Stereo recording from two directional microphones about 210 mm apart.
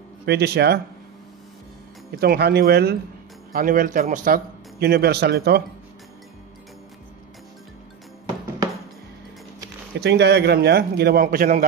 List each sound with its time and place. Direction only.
0.2 s a man's voice: 50° right (ahead or behind)
2.1 s a man's voice: 50° right (ahead or behind)
9.9 s a man's voice: 55° right (ahead or behind)